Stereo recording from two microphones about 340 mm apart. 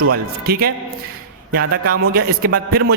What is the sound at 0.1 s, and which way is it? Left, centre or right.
A man's voice, right.